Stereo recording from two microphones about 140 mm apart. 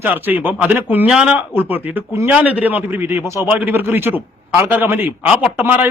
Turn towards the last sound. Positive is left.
turn(degrees=-15)  # may be behind; listen again after turning